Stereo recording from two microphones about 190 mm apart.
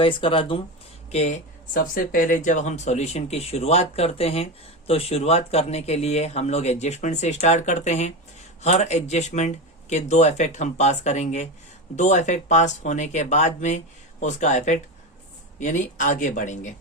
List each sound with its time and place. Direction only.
0.0 s speech: 25° left (ahead or behind)